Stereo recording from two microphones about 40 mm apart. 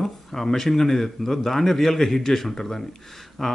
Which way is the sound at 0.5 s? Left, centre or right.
Centre.